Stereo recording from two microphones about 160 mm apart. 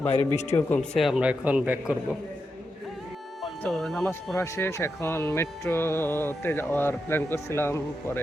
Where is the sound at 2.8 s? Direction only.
Centre (ahead or behind).